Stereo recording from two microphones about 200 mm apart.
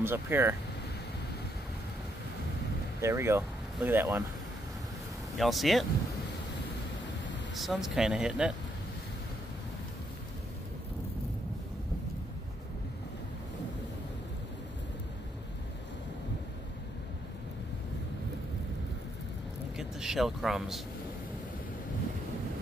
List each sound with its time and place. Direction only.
0.0 s speech: 10° right (ahead or behind)
3.0 s speech: 15° right (ahead or behind)
5.4 s speech: centre (ahead or behind)
7.5 s speech: centre (ahead or behind)
19.8 s a man's voice: centre (ahead or behind)